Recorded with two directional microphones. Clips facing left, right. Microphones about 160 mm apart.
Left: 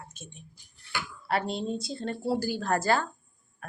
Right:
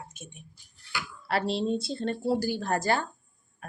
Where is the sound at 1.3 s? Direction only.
30° right (ahead or behind).